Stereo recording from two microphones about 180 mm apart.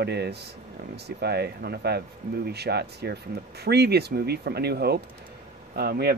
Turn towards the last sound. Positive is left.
turn(degrees=-60)  # may be behind; listen again after turning